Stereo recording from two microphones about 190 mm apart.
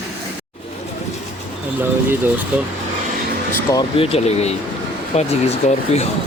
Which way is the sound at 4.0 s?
30° left (ahead or behind).